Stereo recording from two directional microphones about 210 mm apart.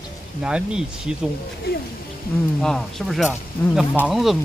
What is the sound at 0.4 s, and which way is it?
Speech, 5° right (ahead or behind).